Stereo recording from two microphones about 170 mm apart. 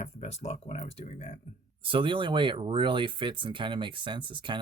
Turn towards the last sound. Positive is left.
turn(degrees=-30)  # may be behind; listen again after turning